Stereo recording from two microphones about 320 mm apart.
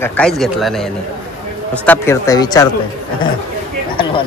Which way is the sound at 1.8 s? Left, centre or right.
Centre.